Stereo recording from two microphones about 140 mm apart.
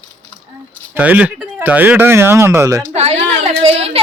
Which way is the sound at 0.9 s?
10° right (ahead or behind).